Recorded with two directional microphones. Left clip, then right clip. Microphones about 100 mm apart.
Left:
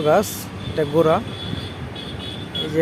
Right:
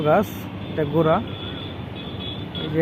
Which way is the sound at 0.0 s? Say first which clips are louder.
Left 2 dB; 55° left (ahead or behind).